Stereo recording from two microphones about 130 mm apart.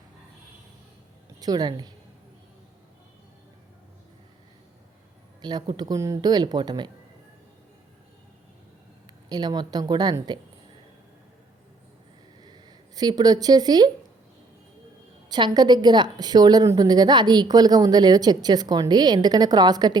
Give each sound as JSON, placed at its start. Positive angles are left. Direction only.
{"t": 1.4, "sound": "a woman's voice", "side_deg": -30}
{"t": 5.4, "sound": "a woman's voice", "side_deg": -35}
{"t": 9.3, "sound": "a woman's voice", "side_deg": -35}
{"t": 12.4, "sound": "a sound", "side_deg": -35}
{"t": 15.3, "sound": "a woman's voice", "side_deg": -35}